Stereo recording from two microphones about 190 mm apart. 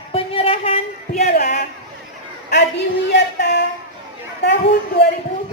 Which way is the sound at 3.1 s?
65° left (ahead or behind).